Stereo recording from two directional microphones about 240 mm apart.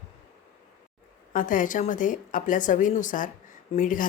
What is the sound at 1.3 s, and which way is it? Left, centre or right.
A woman's voice, left.